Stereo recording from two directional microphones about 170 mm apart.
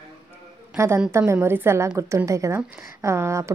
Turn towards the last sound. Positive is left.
turn(degrees=-15)  # may be behind; listen again after turning